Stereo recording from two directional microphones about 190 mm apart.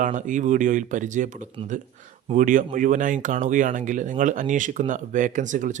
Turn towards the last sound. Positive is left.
turn(degrees=-40)  # may be behind; listen again after turning